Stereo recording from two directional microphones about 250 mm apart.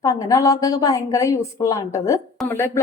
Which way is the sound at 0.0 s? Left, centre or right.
Centre.